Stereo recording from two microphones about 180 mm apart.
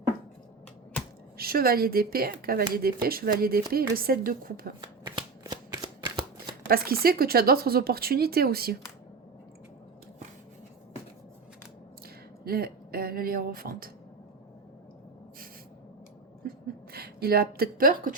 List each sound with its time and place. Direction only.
1.4 s speech: 55° right (ahead or behind)
4.8 s shuffling cards: 25° right (ahead or behind)
6.7 s speech: 55° right (ahead or behind)
12.5 s speech: 55° right (ahead or behind)
16.4 s a sound: 55° right (ahead or behind)
16.9 s speech: 60° right (ahead or behind)